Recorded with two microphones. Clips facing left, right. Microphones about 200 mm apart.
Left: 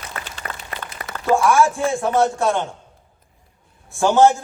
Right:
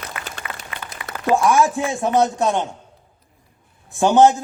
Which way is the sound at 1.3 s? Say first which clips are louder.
Even; 20° right (ahead or behind).